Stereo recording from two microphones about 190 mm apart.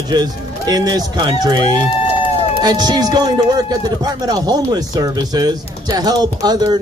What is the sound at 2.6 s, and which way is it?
A man's voice, 20° right (ahead or behind).